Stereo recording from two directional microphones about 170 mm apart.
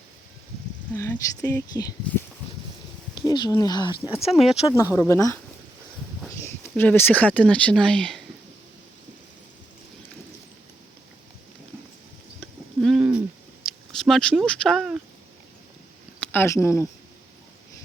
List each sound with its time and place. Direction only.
0.9 s speech: 15° left (ahead or behind)
4.3 s speech: centre (ahead or behind)
4.7 s speech: 15° left (ahead or behind)
6.4 s speech: 10° left (ahead or behind)
12.4 s a sound: centre (ahead or behind)
13.7 s speech: centre (ahead or behind)
16.2 s speech: 10° left (ahead or behind)